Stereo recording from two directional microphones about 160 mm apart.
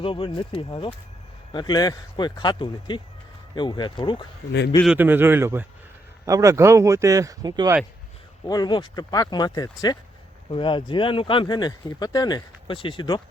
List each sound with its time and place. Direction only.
0.0 s speech: 35° left (ahead or behind)
4.9 s a man's voice: 10° right (ahead or behind)
8.4 s speech: 25° left (ahead or behind)